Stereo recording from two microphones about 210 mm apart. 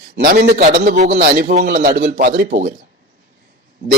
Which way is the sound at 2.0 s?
40° right (ahead or behind).